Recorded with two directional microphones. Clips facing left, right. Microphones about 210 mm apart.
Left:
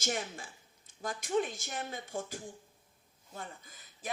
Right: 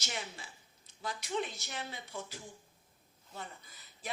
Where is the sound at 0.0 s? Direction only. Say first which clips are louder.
Left 7 dB; 45° left (ahead or behind).